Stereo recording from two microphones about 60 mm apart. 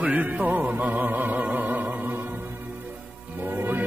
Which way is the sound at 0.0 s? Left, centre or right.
Right.